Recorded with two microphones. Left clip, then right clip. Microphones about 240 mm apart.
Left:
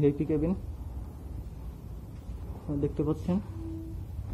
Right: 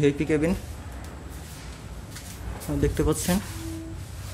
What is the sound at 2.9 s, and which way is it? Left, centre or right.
Speech, right.